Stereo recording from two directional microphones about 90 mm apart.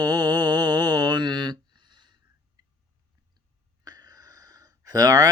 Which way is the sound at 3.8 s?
45° right (ahead or behind).